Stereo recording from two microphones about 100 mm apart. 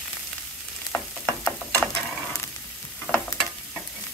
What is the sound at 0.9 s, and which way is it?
Frying, 25° left (ahead or behind).